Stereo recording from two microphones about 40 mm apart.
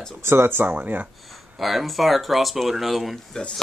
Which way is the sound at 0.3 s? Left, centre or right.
Right.